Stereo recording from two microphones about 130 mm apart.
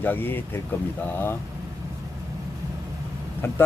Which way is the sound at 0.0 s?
15° left (ahead or behind).